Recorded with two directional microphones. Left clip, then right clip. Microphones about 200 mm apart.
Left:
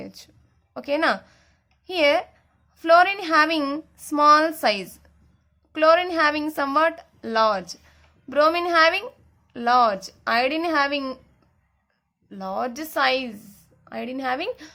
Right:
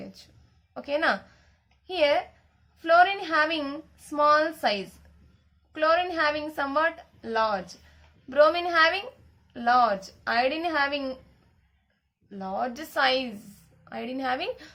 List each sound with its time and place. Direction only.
0.0 s a sound: 35° left (ahead or behind)
0.7 s a woman's voice: 35° left (ahead or behind)
12.3 s a woman's voice: 40° left (ahead or behind)